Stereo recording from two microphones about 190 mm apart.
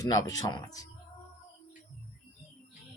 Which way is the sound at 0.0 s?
20° left (ahead or behind).